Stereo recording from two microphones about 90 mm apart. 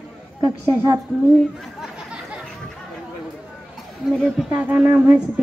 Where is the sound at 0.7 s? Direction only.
35° right (ahead or behind).